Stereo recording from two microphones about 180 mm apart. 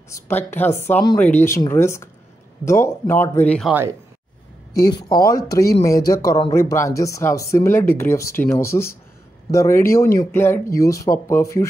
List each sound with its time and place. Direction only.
0.1 s speech: 10° left (ahead or behind)
4.7 s speech: 20° left (ahead or behind)